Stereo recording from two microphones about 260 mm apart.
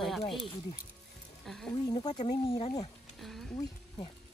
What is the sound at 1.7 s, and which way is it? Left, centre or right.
Speech, centre.